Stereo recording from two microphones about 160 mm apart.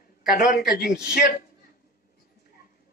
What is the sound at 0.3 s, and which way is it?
Speech, 65° left (ahead or behind).